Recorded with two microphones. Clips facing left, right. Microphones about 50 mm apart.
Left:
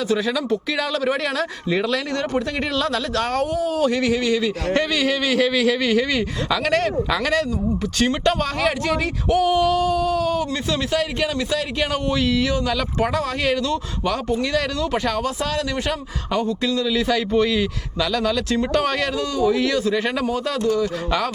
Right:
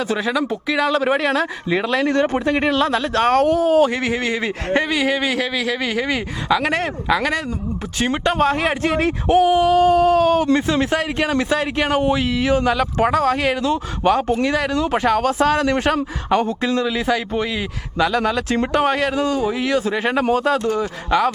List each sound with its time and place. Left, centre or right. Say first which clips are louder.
0.5 s speech: right 2 dB; centre
0.9 s speech: right 5 dB; right
3.2 s speech: right 7 dB; right; by 8.4 s centre
8.4 s speech: right 4 dB; right
9.5 s speech: right 3 dB; centre
9.7 s speech: right 6 dB; right
10.5 s speech: right 5 dB; right
13.4 s speech: right 2 dB; centre
14.0 s speech: right 7 dB; right
15.2 s speech: right 7 dB; right
18.7 s speech: right 5 dB; right